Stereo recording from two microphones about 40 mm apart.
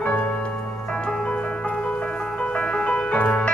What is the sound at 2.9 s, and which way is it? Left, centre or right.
Music, left.